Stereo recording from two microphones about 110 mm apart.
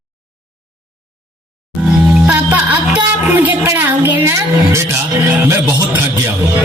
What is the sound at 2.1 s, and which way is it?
A woman's voice, 15° right (ahead or behind).